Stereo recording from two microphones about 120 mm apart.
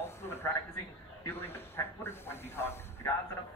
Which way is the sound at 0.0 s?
20° left (ahead or behind).